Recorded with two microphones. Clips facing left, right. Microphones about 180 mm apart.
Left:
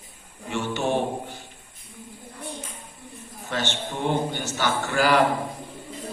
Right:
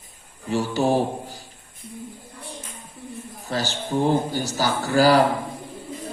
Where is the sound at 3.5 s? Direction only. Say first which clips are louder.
Right 3 dB; 35° right (ahead or behind).